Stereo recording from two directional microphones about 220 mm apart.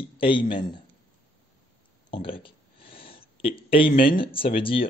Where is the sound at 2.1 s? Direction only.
25° left (ahead or behind).